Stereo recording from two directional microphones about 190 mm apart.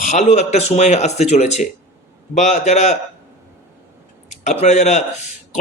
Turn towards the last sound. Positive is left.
turn(degrees=35)  # may be behind; listen again after turning